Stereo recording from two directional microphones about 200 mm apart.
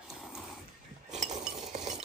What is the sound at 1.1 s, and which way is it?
Chink, 35° right (ahead or behind).